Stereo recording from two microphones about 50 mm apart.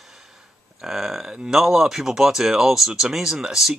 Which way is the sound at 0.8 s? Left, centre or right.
Centre.